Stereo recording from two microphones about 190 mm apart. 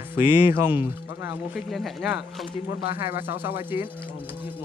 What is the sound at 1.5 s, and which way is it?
Speech, centre (ahead or behind).